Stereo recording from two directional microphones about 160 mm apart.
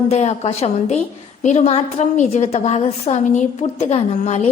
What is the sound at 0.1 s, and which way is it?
A woman's voice, 45° left (ahead or behind).